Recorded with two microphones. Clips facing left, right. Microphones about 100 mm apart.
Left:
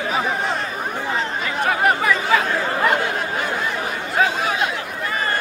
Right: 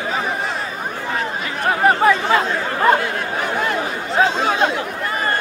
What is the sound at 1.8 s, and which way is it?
Chatter, 30° right (ahead or behind).